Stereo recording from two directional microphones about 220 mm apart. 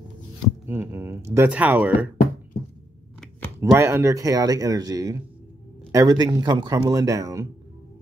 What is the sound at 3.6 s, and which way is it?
Speech, 10° right (ahead or behind).